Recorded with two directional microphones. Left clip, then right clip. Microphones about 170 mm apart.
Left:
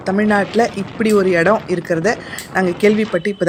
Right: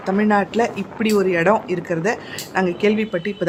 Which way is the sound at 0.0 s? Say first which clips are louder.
Left 2 dB; 20° left (ahead or behind).